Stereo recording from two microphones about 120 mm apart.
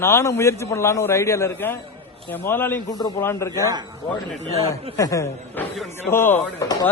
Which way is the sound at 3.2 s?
20° left (ahead or behind).